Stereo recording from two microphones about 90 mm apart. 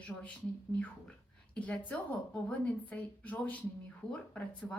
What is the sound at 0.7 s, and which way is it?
A woman's voice, 15° left (ahead or behind).